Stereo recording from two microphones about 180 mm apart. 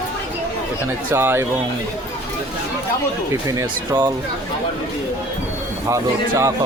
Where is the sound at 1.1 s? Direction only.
15° right (ahead or behind).